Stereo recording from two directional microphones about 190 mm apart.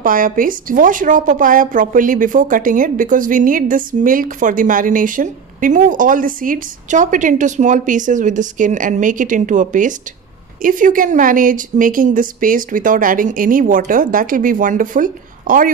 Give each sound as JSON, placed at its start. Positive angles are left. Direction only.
{"t": 0.0, "sound": "a woman's voice", "side_deg": -45}